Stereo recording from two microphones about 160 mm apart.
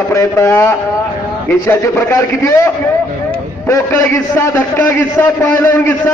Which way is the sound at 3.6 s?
15° left (ahead or behind).